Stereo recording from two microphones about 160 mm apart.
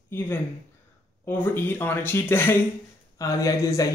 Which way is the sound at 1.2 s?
15° left (ahead or behind).